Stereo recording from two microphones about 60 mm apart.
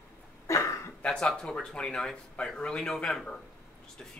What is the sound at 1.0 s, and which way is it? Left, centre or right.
Speech, centre.